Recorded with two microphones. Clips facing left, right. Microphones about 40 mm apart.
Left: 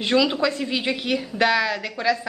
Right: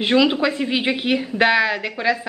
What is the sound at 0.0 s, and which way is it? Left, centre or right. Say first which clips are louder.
A woman's voice: right 3 dB; right.